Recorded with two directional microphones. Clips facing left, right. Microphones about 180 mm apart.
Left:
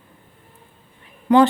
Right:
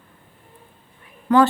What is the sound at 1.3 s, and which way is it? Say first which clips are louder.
Speech: left 2 dB; 15° left (ahead or behind).